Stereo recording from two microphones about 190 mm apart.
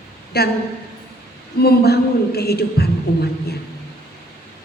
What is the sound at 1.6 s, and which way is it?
Speech, 55° left (ahead or behind).